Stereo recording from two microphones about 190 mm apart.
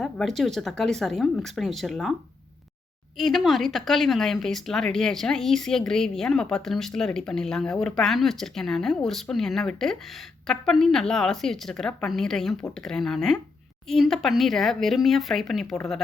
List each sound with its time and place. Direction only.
0.0 s speech: centre (ahead or behind)
3.2 s speech: centre (ahead or behind)